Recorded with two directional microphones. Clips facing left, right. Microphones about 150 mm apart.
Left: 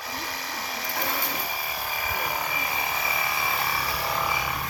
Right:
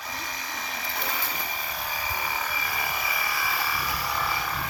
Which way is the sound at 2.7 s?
25° left (ahead or behind).